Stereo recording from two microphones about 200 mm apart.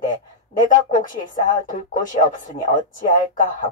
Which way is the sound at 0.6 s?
40° left (ahead or behind).